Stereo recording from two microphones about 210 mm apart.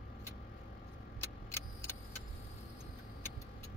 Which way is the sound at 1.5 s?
10° left (ahead or behind).